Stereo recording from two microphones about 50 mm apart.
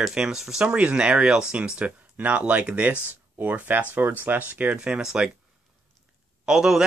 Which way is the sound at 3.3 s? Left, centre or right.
Right.